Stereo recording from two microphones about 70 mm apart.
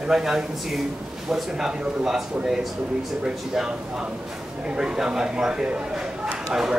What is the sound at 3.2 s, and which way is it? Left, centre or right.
A man's voice, centre.